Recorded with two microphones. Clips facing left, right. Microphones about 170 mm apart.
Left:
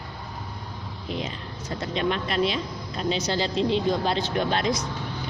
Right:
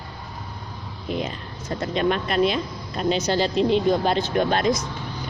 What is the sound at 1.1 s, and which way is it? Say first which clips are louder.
Speech: right 4 dB; 50° right (ahead or behind).